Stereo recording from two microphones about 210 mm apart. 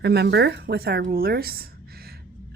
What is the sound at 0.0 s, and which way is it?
Speech, 50° right (ahead or behind).